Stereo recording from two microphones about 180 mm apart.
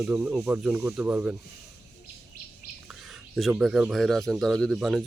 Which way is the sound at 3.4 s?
Centre (ahead or behind).